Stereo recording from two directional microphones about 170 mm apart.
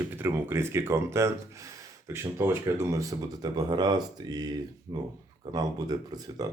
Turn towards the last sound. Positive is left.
turn(degrees=-20)  # may be behind; listen again after turning